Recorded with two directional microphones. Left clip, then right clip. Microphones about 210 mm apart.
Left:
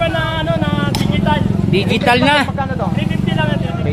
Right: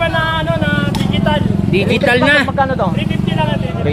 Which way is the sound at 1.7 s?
10° left (ahead or behind).